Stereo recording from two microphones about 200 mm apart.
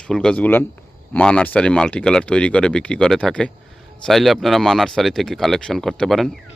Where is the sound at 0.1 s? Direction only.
5° left (ahead or behind).